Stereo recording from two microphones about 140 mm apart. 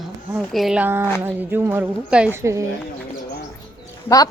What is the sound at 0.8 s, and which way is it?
Speech, 15° right (ahead or behind).